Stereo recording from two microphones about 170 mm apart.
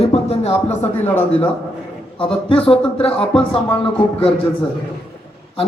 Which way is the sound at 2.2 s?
30° left (ahead or behind).